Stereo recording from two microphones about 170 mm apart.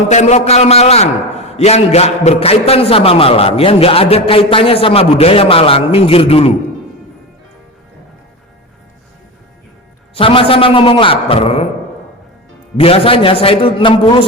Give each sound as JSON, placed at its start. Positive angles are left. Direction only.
{"t": 0.1, "sound": "a man's voice", "side_deg": 40}
{"t": 10.2, "sound": "a man's voice", "side_deg": 30}
{"t": 12.7, "sound": "a man's voice", "side_deg": 35}